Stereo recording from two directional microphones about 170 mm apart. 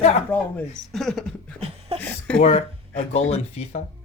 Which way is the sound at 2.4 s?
40° left (ahead or behind).